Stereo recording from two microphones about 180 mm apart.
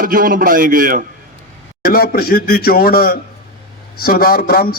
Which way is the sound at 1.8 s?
55° left (ahead or behind).